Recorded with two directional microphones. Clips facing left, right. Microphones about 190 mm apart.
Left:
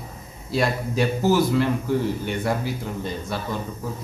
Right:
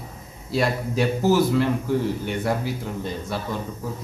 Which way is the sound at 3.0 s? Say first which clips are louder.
Even; 5° right (ahead or behind).